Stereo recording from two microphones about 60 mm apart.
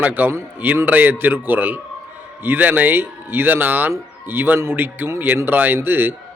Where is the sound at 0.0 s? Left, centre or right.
Right.